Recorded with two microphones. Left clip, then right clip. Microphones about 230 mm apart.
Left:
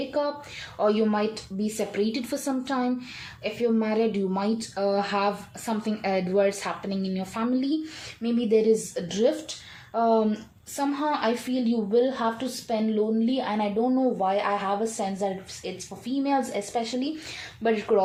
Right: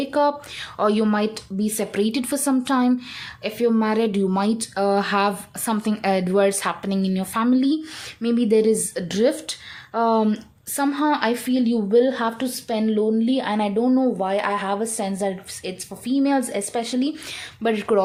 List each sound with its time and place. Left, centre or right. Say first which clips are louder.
0.1 s a woman's voice: right 7 dB; right